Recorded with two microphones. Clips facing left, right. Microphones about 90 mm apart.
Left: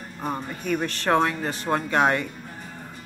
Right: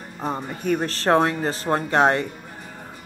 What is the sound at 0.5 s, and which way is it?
A woman's voice, 40° right (ahead or behind).